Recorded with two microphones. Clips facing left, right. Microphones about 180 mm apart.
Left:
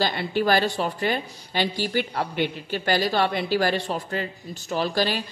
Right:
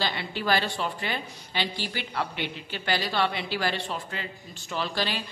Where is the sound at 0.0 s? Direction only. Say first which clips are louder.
Left 7 dB; 45° left (ahead or behind).